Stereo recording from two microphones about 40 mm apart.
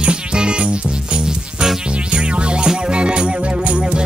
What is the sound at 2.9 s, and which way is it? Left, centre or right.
Music, right.